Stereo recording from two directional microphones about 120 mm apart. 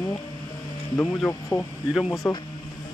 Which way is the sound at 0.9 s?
10° left (ahead or behind).